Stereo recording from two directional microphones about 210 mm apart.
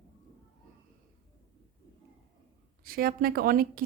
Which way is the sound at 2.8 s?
45° right (ahead or behind).